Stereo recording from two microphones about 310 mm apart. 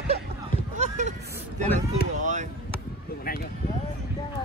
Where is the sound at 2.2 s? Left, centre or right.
Right.